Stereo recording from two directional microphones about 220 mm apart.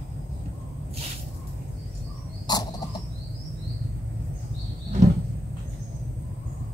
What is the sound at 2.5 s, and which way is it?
Bird, 20° left (ahead or behind).